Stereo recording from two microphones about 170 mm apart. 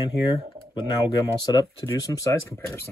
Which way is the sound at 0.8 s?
25° left (ahead or behind).